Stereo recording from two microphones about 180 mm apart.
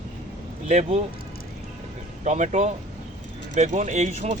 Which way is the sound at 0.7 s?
40° right (ahead or behind).